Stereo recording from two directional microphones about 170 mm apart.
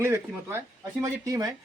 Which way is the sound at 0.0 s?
15° right (ahead or behind).